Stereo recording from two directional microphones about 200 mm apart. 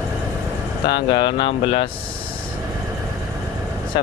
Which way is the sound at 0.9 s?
25° left (ahead or behind).